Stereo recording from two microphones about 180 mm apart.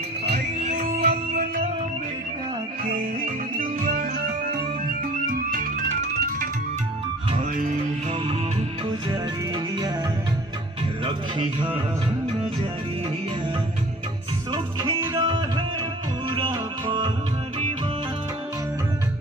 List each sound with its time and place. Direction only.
0.6 s music: 45° right (ahead or behind)
3.5 s music: 50° right (ahead or behind)
7.5 s music: 45° right (ahead or behind)
14.5 s music: 25° right (ahead or behind)